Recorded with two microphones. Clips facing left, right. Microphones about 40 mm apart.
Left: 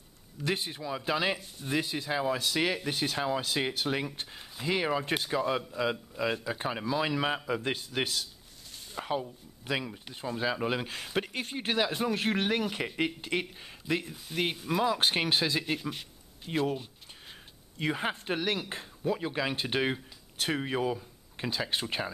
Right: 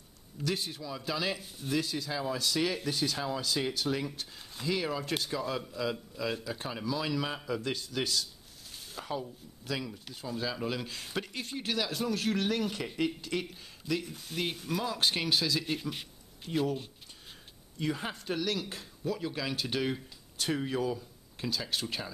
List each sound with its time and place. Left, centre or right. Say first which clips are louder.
0.4 s speech: left 2 dB; left
15.6 s speech: left 2 dB; centre
16.5 s speech: left 1 dB; left
17.7 s speech: left 3 dB; left